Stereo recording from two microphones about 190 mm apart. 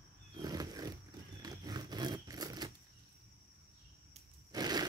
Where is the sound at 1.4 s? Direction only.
20° right (ahead or behind).